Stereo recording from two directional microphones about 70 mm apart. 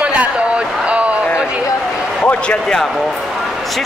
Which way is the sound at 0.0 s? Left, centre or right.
Centre.